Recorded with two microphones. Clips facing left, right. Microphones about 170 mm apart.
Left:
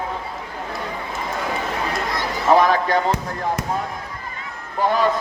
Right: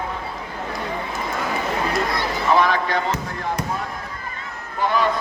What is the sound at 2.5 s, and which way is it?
Speech, 40° left (ahead or behind).